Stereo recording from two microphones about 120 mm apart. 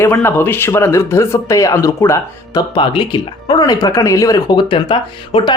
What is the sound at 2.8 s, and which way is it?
Speech, 40° left (ahead or behind).